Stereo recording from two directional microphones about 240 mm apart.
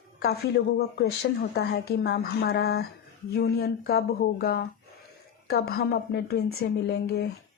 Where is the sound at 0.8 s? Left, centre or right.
Left.